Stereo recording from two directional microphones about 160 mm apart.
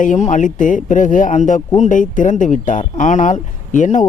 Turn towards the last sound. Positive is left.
turn(degrees=50)  # may be behind; listen again after turning